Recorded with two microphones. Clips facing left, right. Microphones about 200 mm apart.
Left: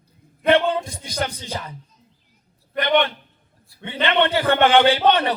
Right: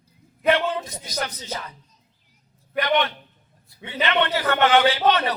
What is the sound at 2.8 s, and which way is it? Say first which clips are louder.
Speech: left 1 dB; 5° right (ahead or behind).